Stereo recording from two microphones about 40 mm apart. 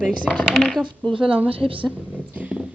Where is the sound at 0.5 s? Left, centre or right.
Centre.